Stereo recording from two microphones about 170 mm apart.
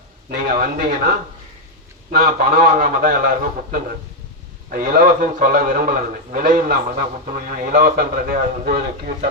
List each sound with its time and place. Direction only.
0.3 s a man's voice: 60° right (ahead or behind)